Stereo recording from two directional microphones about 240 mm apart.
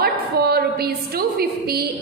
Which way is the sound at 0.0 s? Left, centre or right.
Right.